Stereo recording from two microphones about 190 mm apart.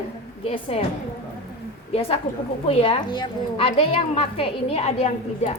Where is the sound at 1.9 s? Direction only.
30° left (ahead or behind).